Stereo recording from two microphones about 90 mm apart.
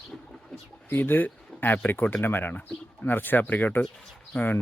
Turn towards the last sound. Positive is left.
turn(degrees=20)  # may be behind; listen again after turning